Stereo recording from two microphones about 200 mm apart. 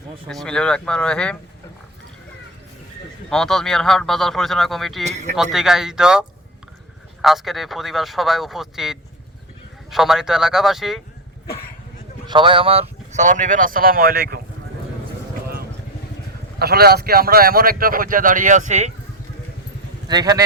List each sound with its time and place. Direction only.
0.3 s a man's voice: 5° left (ahead or behind)
3.2 s a man's voice: 5° left (ahead or behind)
5.0 s speech: 35° right (ahead or behind)
5.3 s a man's voice: centre (ahead or behind)
12.3 s speech: 25° right (ahead or behind); by 14.4 s 50° right (ahead or behind)
16.6 s a man's voice: 50° right (ahead or behind)
20.1 s a man's voice: 20° right (ahead or behind)